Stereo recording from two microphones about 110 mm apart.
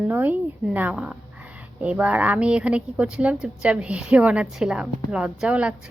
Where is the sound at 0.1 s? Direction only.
15° right (ahead or behind).